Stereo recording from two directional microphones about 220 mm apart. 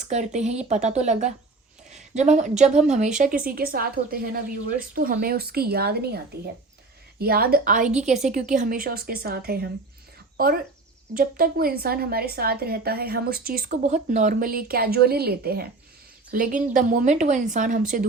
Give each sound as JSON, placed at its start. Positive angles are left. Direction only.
{"t": 0.1, "sound": "a woman's voice", "side_deg": -30}